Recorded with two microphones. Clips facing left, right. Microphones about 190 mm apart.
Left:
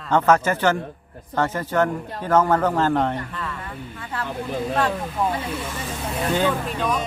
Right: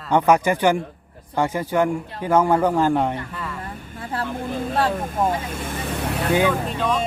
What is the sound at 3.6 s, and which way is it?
Vehicle, 40° right (ahead or behind).